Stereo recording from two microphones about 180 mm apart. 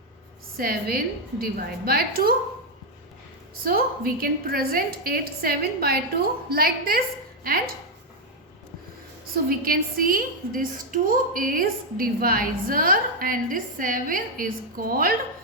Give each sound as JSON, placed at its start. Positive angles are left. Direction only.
{"t": 0.5, "sound": "a woman's voice", "side_deg": -55}
{"t": 3.6, "sound": "a woman's voice", "side_deg": -55}
{"t": 9.3, "sound": "a woman's voice", "side_deg": -55}